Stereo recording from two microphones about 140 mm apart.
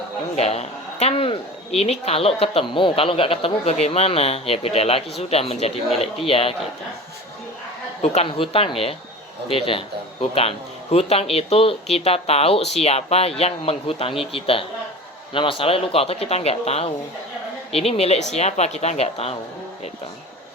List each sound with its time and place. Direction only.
0.3 s a man's voice: 50° left (ahead or behind)
8.0 s a man's voice: 45° left (ahead or behind)